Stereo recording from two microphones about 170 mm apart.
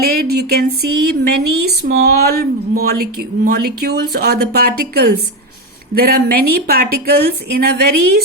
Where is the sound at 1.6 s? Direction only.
65° right (ahead or behind).